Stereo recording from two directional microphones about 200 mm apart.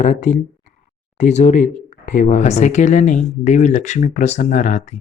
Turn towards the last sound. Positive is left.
turn(degrees=35)  # may be behind; listen again after turning